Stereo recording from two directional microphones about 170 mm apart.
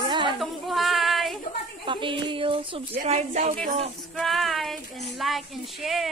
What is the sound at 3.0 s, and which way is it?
Speech, 45° right (ahead or behind).